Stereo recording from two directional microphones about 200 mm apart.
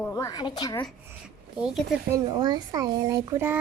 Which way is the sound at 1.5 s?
5° right (ahead or behind).